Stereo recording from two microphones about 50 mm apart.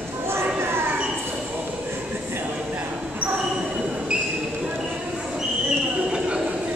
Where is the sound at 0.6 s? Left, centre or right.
Right.